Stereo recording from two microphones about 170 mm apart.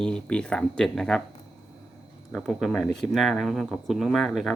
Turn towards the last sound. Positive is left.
turn(degrees=0)  # may be behind; listen again after turning